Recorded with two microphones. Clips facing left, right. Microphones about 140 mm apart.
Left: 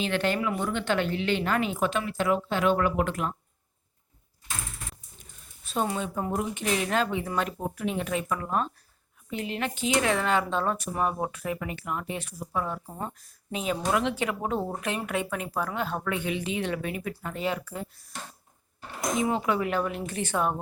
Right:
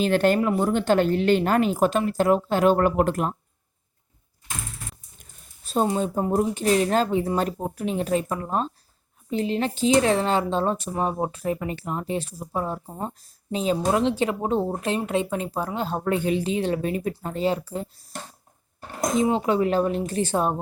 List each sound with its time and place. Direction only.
0.0 s speech: 45° right (ahead or behind)
5.6 s speech: 35° right (ahead or behind)
19.1 s speech: 30° right (ahead or behind)